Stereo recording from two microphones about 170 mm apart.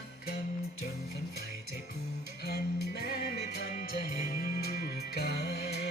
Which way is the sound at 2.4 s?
70° left (ahead or behind).